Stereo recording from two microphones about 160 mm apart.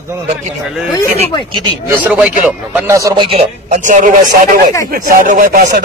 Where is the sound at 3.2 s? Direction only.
35° right (ahead or behind).